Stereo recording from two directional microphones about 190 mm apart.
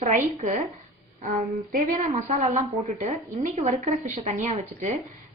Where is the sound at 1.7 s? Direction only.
40° right (ahead or behind).